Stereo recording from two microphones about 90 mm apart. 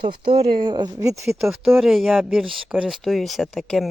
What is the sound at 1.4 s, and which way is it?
Speech, 5° right (ahead or behind).